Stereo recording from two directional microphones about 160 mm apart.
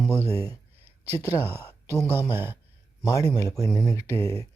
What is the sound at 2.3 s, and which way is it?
Speech, 15° right (ahead or behind).